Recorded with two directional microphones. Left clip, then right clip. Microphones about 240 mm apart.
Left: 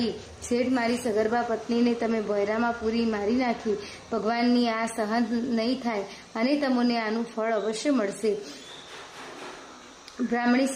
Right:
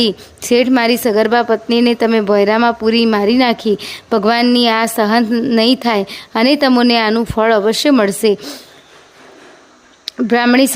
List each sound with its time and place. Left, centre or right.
0.0 s a woman's voice: right
10.3 s a woman's voice: right